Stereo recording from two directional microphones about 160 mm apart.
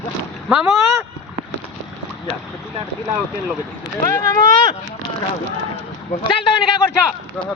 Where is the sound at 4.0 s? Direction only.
20° left (ahead or behind).